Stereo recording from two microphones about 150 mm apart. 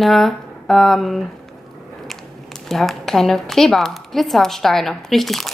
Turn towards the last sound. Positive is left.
turn(degrees=0)  # may be behind; listen again after turning